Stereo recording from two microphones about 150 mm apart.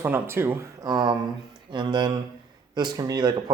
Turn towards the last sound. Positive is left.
turn(degrees=-30)  # may be behind; listen again after turning